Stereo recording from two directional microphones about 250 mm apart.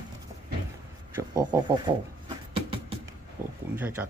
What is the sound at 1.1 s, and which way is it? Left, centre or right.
Speech, centre.